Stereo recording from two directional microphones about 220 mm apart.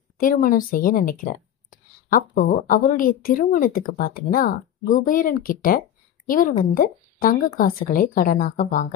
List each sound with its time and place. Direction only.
0.2 s a woman's voice: 40° left (ahead or behind)